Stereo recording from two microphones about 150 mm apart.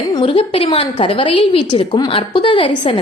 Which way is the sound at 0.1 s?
35° left (ahead or behind).